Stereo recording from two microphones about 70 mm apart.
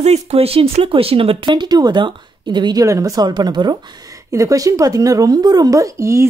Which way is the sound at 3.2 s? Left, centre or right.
Right.